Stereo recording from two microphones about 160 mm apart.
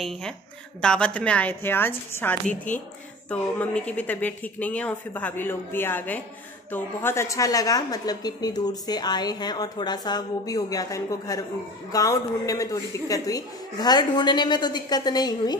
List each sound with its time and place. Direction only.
0.7 s a woman's voice: 5° left (ahead or behind); by 15.5 s 25° left (ahead or behind)